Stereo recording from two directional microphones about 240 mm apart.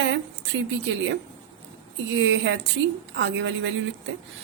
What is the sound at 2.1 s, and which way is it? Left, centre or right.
A woman's voice, right.